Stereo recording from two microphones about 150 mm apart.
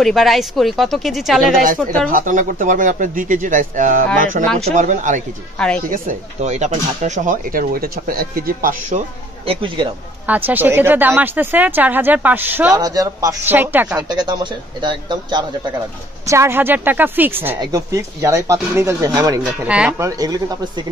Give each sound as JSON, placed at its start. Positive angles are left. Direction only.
{"t": 0.0, "sound": "speech", "side_deg": 0}
{"t": 1.9, "sound": "speech", "side_deg": -65}
{"t": 9.5, "sound": "a man's voice", "side_deg": -35}
{"t": 10.2, "sound": "speech", "side_deg": -10}
{"t": 12.7, "sound": "speech", "side_deg": -25}
{"t": 13.5, "sound": "speech", "side_deg": -10}
{"t": 13.9, "sound": "a man's voice", "side_deg": -25}
{"t": 16.3, "sound": "speech", "side_deg": -15}
{"t": 19.6, "sound": "speech", "side_deg": -10}
{"t": 20.0, "sound": "speech", "side_deg": -25}